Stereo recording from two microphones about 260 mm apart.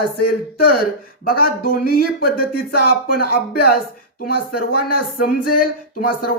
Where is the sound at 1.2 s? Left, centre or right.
Left.